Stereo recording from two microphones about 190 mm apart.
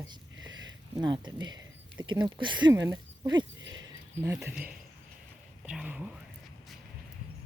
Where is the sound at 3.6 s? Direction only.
85° right.